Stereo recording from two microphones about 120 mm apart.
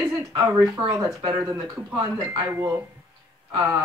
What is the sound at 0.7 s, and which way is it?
Speech, 40° right (ahead or behind).